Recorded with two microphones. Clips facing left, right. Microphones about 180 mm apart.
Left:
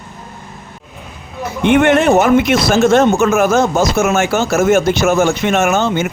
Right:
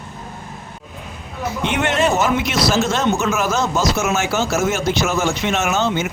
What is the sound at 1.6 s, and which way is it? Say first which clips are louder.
Speech: left 9 dB; 55° left (ahead or behind).